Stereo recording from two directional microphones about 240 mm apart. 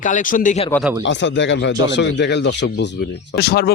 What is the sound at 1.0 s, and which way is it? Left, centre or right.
Speech, left.